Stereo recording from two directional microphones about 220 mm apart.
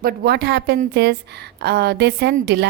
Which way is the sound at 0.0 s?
45° right (ahead or behind).